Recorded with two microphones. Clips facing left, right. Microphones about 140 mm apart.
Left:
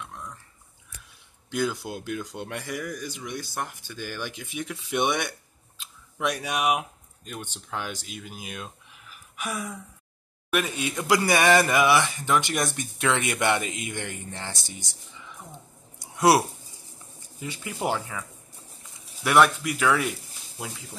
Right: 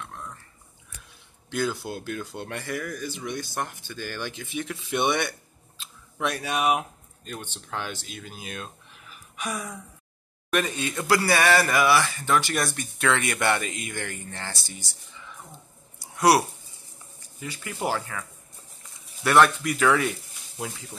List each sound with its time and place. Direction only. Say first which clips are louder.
1.5 s speech: even; 10° left (ahead or behind)
16.0 s a sound: even; 25° left (ahead or behind)
17.4 s speech: left 1 dB; 20° left (ahead or behind)
17.8 s speech: even; 10° left (ahead or behind)
19.2 s speech: right 1 dB; 10° left (ahead or behind)